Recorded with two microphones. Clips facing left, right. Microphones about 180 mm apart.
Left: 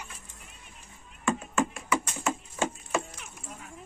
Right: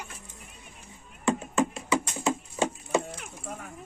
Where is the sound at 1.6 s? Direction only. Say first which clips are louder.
Right 2 dB; 20° right (ahead or behind).